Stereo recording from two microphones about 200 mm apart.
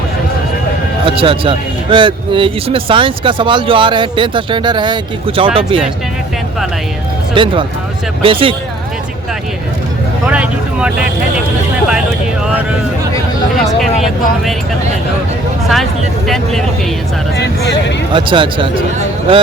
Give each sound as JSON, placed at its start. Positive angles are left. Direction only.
{"t": 1.0, "sound": "speech", "side_deg": -25}
{"t": 7.3, "sound": "speech", "side_deg": -25}
{"t": 10.2, "sound": "speech", "side_deg": -5}
{"t": 15.7, "sound": "speech", "side_deg": 0}
{"t": 18.1, "sound": "speech", "side_deg": -25}